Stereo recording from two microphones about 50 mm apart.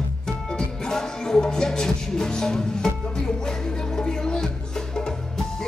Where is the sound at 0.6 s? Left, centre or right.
Centre.